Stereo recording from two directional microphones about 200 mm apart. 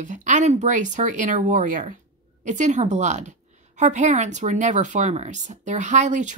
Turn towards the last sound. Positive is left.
turn(degrees=-35)  # may be behind; listen again after turning